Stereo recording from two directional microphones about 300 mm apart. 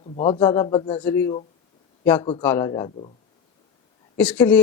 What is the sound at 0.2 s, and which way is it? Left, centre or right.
Speech, centre.